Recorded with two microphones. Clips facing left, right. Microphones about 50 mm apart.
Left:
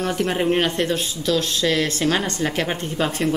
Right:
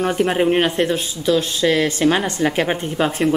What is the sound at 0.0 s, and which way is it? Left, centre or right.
A woman's voice, centre.